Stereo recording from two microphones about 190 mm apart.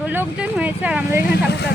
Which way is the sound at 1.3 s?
60° left (ahead or behind).